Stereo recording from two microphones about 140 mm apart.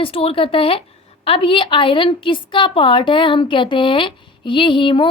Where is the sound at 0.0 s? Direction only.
40° left (ahead or behind).